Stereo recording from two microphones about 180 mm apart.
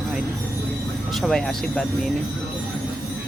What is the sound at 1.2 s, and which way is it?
Speech, centre (ahead or behind).